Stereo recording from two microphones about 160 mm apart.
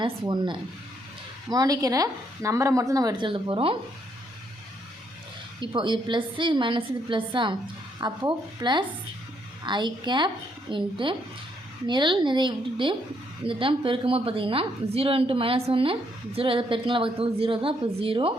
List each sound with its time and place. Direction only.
0.0 s speech: 30° right (ahead or behind)
5.5 s a woman's voice: 30° right (ahead or behind)